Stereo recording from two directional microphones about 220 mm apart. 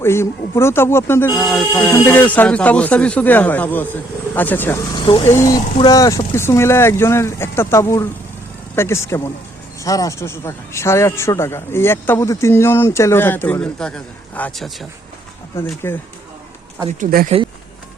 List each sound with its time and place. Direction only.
0.0 s a man's voice: 10° left (ahead or behind)
17.0 s speech: 40° right (ahead or behind)